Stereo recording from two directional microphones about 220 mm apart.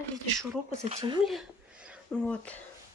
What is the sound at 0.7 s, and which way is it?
Speech, 30° right (ahead or behind).